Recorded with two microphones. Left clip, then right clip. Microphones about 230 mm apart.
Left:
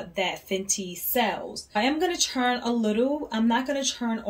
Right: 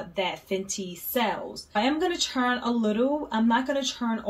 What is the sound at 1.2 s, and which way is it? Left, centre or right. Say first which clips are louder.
Speech: even; right.